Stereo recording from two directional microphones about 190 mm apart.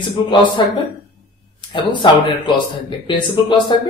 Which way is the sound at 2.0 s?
25° left (ahead or behind).